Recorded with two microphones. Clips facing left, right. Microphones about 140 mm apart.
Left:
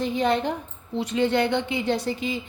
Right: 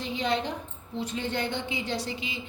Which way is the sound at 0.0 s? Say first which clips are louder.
Left 6 dB; 50° left (ahead or behind).